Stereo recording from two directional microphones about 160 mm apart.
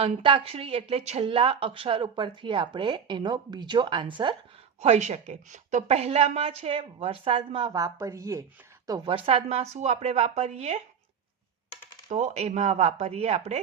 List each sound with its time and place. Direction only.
0.0 s speech: 35° right (ahead or behind)
4.8 s speech: 45° right (ahead or behind); by 8.4 s 20° right (ahead or behind)
9.0 s speech: 35° right (ahead or behind)
12.0 s speech: 45° right (ahead or behind)